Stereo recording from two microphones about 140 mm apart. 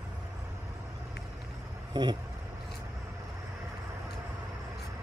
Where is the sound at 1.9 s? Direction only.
30° right (ahead or behind).